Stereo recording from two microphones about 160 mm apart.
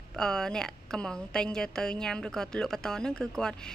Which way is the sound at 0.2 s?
5° left (ahead or behind).